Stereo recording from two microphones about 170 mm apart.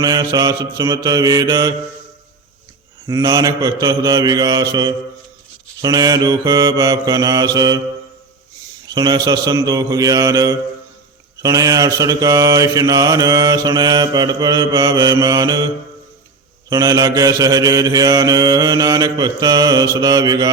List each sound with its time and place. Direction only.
0.0 s mantra: 20° right (ahead or behind)
3.1 s mantra: 20° right (ahead or behind)
8.9 s mantra: 25° right (ahead or behind)
16.6 s mantra: 20° right (ahead or behind)